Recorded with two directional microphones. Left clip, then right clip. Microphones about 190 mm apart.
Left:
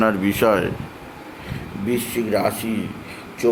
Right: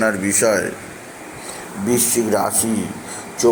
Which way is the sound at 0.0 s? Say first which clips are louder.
Right 1 dB; 20° left (ahead or behind).